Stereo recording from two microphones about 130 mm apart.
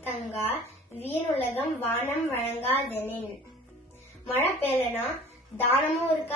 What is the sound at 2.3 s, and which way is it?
Speech, 50° left (ahead or behind).